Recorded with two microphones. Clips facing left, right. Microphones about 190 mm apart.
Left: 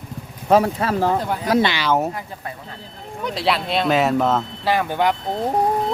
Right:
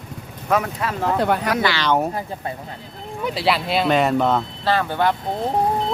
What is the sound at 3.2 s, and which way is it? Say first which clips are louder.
Speech: right 1 dB; centre (ahead or behind).